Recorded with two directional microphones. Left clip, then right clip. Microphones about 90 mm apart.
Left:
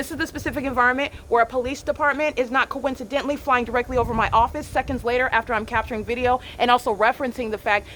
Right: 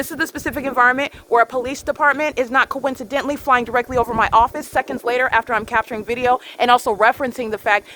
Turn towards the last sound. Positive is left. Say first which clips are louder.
# right 4 dB
turn(degrees=-60)  # may be behind; listen again after turning